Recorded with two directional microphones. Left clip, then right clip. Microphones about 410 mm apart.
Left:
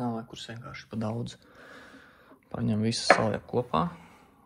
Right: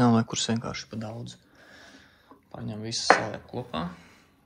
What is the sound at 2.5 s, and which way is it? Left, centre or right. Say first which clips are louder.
Speech: left 3 dB; centre.